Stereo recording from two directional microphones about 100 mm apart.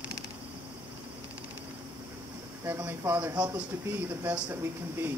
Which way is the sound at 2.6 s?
20° right (ahead or behind).